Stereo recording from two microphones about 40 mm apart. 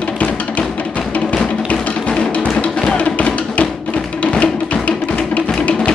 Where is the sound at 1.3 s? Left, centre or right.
Left.